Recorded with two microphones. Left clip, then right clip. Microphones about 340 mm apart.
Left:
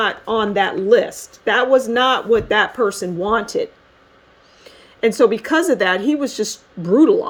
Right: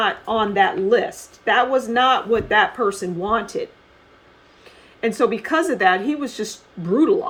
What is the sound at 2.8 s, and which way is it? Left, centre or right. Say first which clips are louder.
Speech: left 2 dB; left.